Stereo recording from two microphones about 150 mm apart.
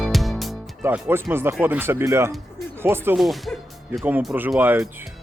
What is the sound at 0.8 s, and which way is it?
Speech, 15° right (ahead or behind).